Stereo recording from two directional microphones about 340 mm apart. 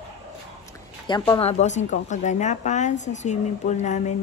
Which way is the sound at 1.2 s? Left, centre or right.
Centre.